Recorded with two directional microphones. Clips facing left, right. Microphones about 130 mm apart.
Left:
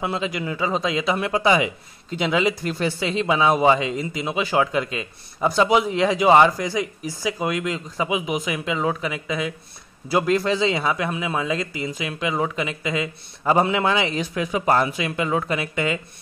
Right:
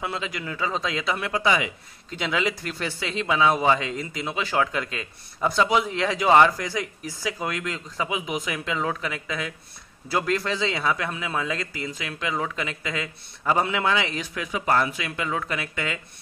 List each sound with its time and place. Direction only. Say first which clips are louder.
0.0 s speech: left 5 dB; 20° left (ahead or behind)
13.4 s a man's voice: left 4 dB; 25° left (ahead or behind)